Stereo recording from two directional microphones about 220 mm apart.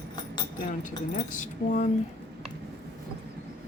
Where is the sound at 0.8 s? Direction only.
35° left (ahead or behind).